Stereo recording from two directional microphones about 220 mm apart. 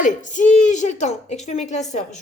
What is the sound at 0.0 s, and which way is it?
A woman's voice, 35° left (ahead or behind).